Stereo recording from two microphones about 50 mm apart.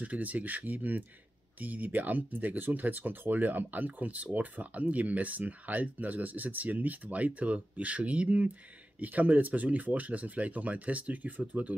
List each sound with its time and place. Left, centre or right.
0.0 s speech: right